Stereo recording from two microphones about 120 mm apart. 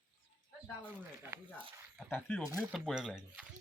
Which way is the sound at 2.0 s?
15° left (ahead or behind).